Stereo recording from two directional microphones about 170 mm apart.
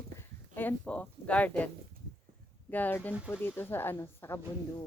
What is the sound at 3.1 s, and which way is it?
Speech, 5° right (ahead or behind).